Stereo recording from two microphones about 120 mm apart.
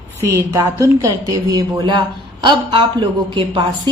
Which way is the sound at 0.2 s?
25° right (ahead or behind).